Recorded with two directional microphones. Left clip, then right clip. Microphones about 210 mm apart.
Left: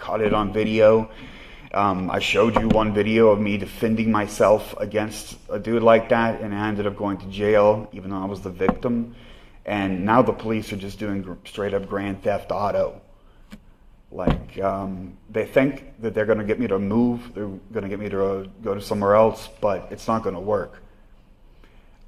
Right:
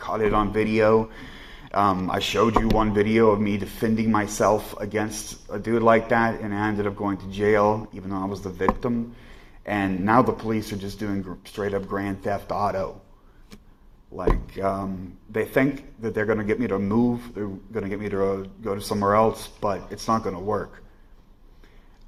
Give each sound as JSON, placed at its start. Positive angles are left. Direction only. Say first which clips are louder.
{"t": 0.0, "sound": "speech", "louder": "left 1 dB", "side_deg": -15}
{"t": 14.2, "sound": "speech", "louder": "left 1 dB", "side_deg": -20}